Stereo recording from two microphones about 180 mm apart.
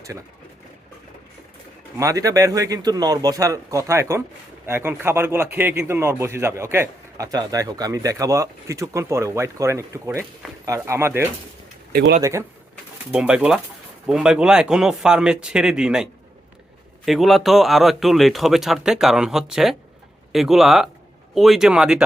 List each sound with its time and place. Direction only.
2.0 s a man's voice: 20° right (ahead or behind)
11.9 s speech: 55° right (ahead or behind)
12.2 s speech: 15° right (ahead or behind)
13.1 s speech: 5° right (ahead or behind)
17.1 s speech: centre (ahead or behind)